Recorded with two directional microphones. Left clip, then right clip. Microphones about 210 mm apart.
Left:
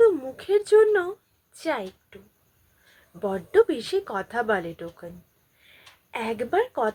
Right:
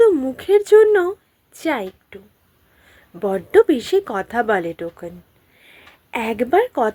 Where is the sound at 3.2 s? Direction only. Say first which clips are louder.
Right 6 dB; 40° right (ahead or behind).